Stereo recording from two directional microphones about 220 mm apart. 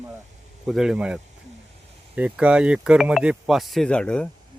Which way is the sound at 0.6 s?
Centre (ahead or behind).